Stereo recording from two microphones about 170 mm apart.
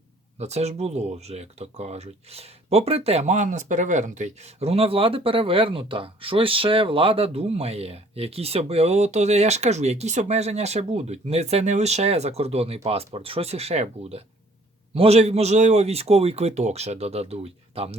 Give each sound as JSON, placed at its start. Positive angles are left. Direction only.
{"t": 0.3, "sound": "speech", "side_deg": -40}